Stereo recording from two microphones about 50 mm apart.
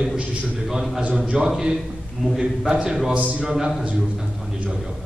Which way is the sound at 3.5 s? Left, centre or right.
Centre.